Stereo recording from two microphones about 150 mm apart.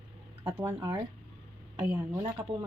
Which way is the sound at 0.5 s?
15° right (ahead or behind).